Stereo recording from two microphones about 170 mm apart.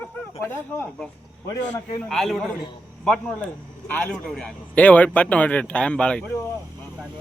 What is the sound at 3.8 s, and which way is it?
A man's voice, 5° left (ahead or behind).